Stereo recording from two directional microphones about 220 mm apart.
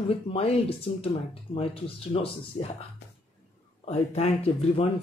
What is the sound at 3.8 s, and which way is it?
Speech, 30° left (ahead or behind).